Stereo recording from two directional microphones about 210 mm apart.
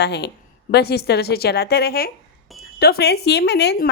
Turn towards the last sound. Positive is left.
turn(degrees=55)  # may be behind; listen again after turning